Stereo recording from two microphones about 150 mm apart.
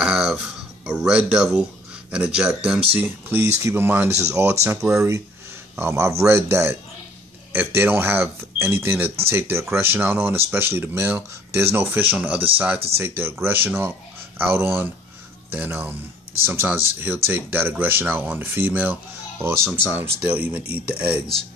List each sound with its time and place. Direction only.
0.0 s music: 5° right (ahead or behind)
3.0 s speech: 15° right (ahead or behind)